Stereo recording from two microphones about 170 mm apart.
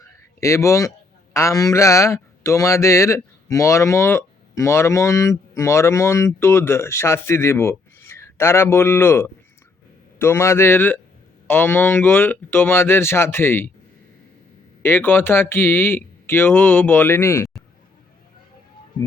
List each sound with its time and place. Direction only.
0.0 s a man's voice: 20° left (ahead or behind)
14.8 s speech: 15° left (ahead or behind)